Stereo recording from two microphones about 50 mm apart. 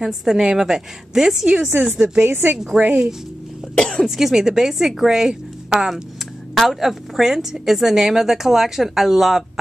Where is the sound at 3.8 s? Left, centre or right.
Centre.